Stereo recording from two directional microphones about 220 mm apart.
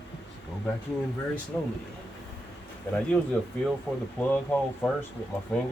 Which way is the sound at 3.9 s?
Centre (ahead or behind).